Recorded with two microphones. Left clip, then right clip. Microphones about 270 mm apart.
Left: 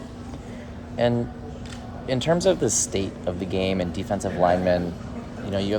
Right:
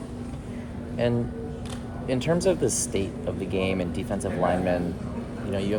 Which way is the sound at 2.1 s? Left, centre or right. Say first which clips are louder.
Left 3 dB; left.